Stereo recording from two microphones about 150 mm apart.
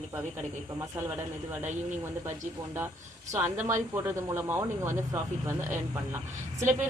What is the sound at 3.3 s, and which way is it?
Speech, 15° right (ahead or behind).